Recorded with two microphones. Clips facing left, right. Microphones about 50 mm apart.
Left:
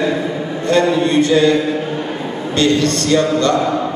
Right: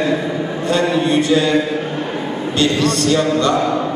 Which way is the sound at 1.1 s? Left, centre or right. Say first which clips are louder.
Left 2 dB; centre.